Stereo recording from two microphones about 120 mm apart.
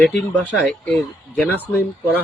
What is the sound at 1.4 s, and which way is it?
Speech, 15° left (ahead or behind).